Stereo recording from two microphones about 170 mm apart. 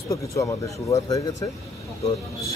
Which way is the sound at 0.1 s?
20° left (ahead or behind).